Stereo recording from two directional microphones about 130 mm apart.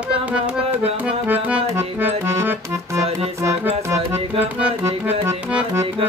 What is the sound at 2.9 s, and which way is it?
Music, 25° right (ahead or behind).